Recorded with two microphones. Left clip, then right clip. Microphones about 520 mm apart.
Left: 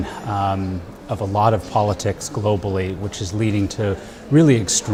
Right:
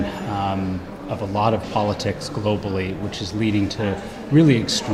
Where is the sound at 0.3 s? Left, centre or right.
Left.